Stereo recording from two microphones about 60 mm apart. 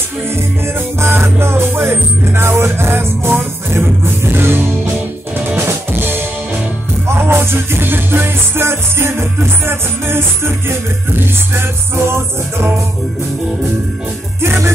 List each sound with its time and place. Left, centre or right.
0.3 s music: right
5.6 s music: right
14.4 s music: right